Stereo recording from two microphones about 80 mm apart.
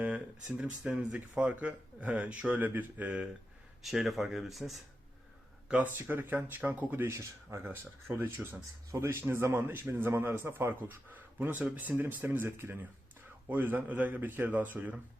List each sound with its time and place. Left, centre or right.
0.0 s speech: centre
3.8 s speech: centre
5.6 s a man's voice: centre